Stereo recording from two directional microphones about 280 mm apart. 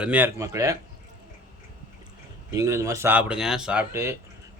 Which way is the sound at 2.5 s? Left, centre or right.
Centre.